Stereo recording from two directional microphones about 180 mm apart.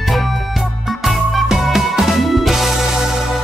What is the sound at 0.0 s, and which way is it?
Music, centre (ahead or behind).